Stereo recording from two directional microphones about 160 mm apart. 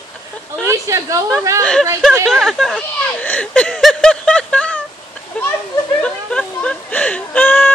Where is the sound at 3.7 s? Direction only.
Centre (ahead or behind).